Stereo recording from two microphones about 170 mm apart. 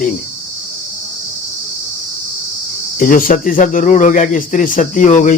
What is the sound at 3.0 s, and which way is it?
Speech, 50° left (ahead or behind).